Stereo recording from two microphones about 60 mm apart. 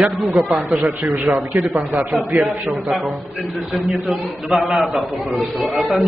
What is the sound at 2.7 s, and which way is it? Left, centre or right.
A man's voice, centre.